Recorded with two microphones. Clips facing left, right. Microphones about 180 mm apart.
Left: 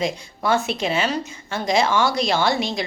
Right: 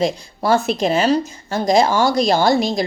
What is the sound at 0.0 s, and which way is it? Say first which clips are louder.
Speech: right 4 dB; 35° right (ahead or behind).